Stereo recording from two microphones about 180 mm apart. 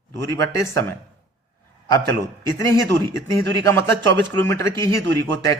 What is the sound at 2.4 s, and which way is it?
Speech, 15° left (ahead or behind).